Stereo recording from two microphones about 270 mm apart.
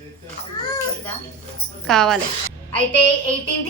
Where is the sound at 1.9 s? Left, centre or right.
Centre.